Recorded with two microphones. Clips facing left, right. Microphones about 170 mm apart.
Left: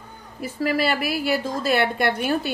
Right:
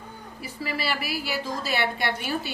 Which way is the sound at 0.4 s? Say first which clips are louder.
Left 9 dB; 50° left (ahead or behind).